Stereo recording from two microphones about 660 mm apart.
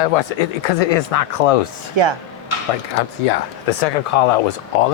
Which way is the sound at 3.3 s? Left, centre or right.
Left.